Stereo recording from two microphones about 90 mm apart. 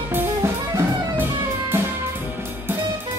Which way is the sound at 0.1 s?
30° right (ahead or behind).